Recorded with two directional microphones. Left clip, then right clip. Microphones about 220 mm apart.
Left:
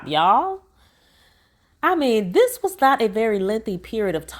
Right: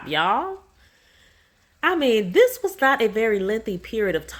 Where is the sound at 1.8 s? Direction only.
35° left (ahead or behind).